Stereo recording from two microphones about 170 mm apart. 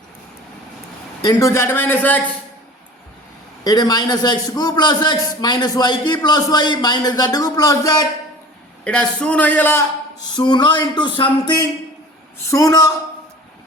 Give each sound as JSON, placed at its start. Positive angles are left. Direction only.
{"t": 1.2, "sound": "speech", "side_deg": 20}
{"t": 3.6, "sound": "a man's voice", "side_deg": 20}
{"t": 8.8, "sound": "speech", "side_deg": 5}
{"t": 10.3, "sound": "a man's voice", "side_deg": 25}